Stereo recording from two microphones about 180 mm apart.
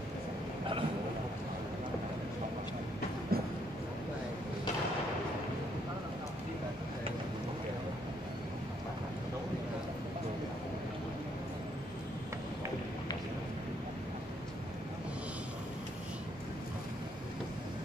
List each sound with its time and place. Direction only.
3.3 s train: 60° right (ahead or behind)